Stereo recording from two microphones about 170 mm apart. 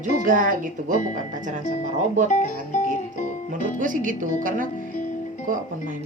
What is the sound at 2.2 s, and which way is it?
Speech, 45° left (ahead or behind).